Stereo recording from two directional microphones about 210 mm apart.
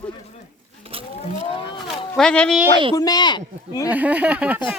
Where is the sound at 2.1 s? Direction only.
5° left (ahead or behind).